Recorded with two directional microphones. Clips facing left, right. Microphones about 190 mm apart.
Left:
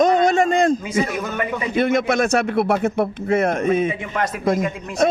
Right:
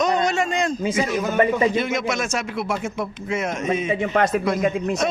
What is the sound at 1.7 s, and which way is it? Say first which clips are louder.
Speech: left 5 dB; 55° left (ahead or behind).